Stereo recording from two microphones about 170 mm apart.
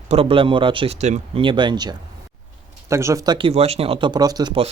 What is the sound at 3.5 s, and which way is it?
Speech, 35° right (ahead or behind).